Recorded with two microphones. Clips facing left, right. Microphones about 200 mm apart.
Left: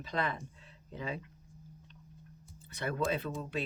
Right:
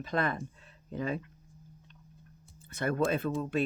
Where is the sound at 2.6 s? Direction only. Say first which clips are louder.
Right 5 dB; 50° right (ahead or behind).